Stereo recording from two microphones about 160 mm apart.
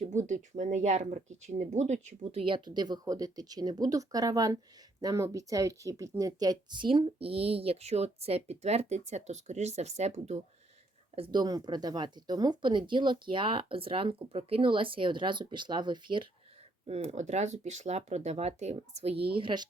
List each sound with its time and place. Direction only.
0.0 s speech: 50° right (ahead or behind)
11.1 s speech: 30° right (ahead or behind)
16.8 s speech: 45° right (ahead or behind)